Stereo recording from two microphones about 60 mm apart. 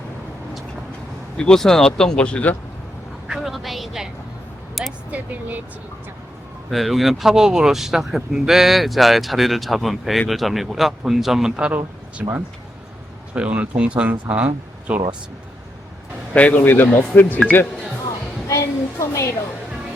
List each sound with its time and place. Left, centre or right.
1.4 s speech: centre
3.2 s a sound: centre
5.1 s speech: right
6.7 s speech: centre
12.2 s speech: centre
16.3 s speech: left
16.6 s speech: left
18.4 s a sound: left